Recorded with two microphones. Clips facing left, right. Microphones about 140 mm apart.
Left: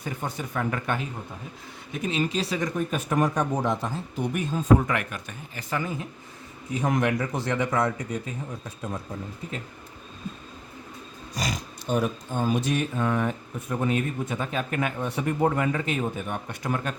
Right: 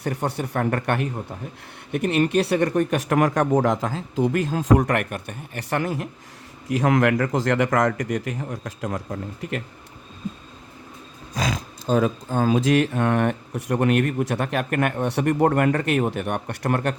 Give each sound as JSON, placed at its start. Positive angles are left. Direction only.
{"t": 0.0, "sound": "speech", "side_deg": -70}
{"t": 6.7, "sound": "a man's voice", "side_deg": -90}
{"t": 12.5, "sound": "speech", "side_deg": -90}